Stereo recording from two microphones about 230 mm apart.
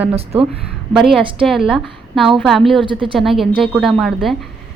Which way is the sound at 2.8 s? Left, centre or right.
Right.